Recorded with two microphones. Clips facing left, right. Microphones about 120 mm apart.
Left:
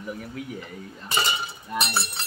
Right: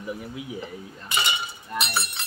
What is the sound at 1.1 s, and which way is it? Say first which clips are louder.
Speech: left 1 dB; 35° left (ahead or behind).